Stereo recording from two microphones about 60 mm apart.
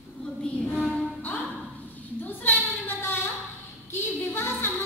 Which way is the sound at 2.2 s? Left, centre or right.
Left.